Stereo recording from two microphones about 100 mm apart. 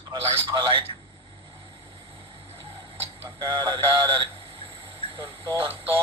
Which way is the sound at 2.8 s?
50° right (ahead or behind).